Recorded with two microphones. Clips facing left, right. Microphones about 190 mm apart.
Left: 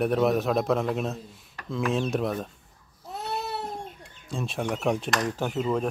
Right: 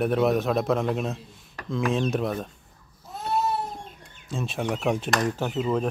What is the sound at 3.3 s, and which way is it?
Baby cry, 65° left (ahead or behind).